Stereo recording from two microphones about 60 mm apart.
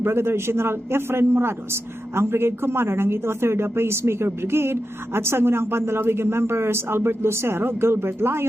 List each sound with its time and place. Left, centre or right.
0.0 s a man's voice: right